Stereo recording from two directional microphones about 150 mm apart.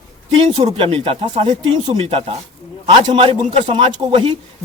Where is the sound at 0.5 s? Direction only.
40° right (ahead or behind).